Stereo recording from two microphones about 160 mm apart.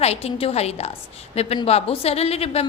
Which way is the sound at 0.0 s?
40° left (ahead or behind).